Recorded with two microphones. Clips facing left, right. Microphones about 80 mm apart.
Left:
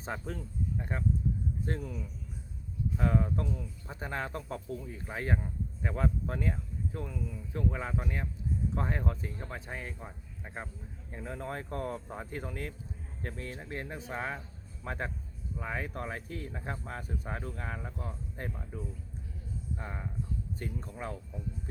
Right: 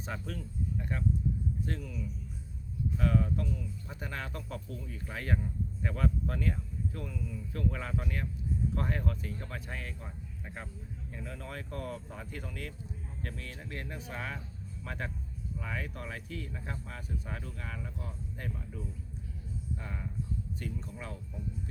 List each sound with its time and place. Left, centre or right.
0.0 s speech: left
19.8 s speech: left